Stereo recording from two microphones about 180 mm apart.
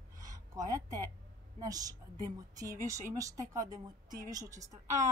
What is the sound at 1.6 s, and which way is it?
A woman's voice, 20° right (ahead or behind).